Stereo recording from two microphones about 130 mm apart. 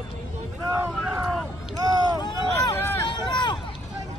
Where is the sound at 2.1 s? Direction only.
35° left (ahead or behind).